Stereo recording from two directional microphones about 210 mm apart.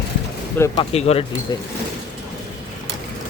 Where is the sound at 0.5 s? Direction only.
15° left (ahead or behind).